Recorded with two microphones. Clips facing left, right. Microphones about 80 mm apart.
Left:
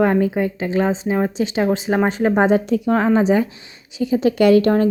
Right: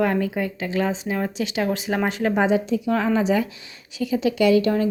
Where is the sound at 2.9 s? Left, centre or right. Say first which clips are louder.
Left 5 dB; left.